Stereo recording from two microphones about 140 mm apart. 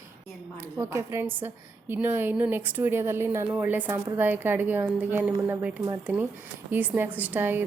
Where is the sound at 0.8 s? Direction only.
20° right (ahead or behind).